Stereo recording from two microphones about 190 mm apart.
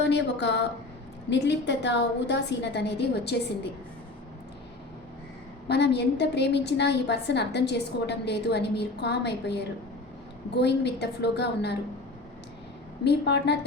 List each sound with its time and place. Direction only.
0.0 s a woman's voice: 65° left (ahead or behind)
5.6 s a woman's voice: 60° left (ahead or behind)
13.1 s a woman's voice: 65° left (ahead or behind)